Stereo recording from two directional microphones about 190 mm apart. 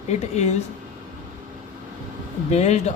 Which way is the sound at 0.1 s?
35° left (ahead or behind).